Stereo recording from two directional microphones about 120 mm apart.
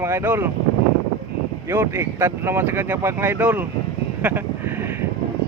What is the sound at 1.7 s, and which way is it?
Speech, 20° right (ahead or behind).